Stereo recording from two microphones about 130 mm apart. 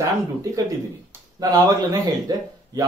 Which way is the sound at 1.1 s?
30° right (ahead or behind).